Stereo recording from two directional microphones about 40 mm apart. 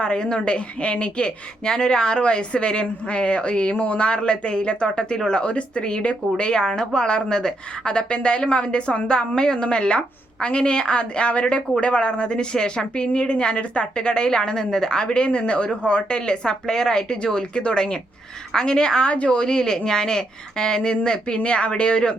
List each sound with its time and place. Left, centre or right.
0.0 s a woman's voice: left
1.6 s a woman's voice: centre